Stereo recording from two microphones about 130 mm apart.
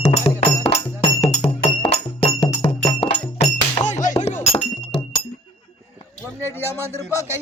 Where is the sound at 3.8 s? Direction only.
70° left (ahead or behind); by 5.0 s 55° left (ahead or behind).